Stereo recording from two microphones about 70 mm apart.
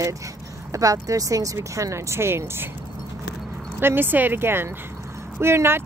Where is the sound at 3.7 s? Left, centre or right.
Right.